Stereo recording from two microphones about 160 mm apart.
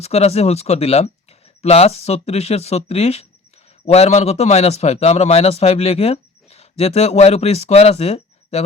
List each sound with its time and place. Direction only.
0.0 s a man's voice: 40° left (ahead or behind)